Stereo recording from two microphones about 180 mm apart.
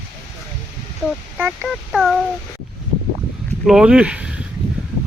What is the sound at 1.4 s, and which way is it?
Speech, 5° right (ahead or behind).